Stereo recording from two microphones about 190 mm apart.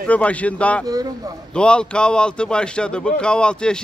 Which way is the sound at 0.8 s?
20° right (ahead or behind).